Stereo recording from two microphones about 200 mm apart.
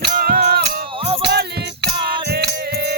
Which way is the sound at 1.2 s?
55° right (ahead or behind).